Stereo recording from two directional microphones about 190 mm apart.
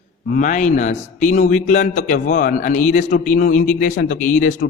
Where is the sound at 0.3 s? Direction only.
40° left (ahead or behind).